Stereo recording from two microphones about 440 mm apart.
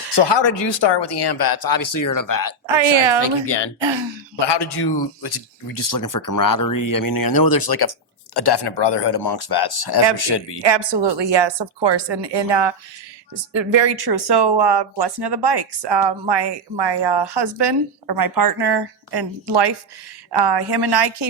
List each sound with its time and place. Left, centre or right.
0.1 s speech: left
2.7 s a woman's voice: right
3.2 s speech: left
3.8 s speech: right
4.4 s speech: left
10.6 s a woman's voice: right
13.3 s speech: right